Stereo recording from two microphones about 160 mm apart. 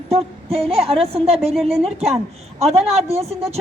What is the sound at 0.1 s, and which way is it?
A woman's voice, 40° right (ahead or behind).